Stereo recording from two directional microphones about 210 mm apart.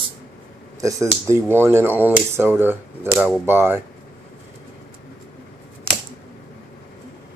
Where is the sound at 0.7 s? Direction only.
15° right (ahead or behind).